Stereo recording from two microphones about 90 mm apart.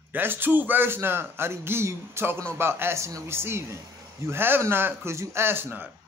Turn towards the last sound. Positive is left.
turn(degrees=-25)  # may be behind; listen again after turning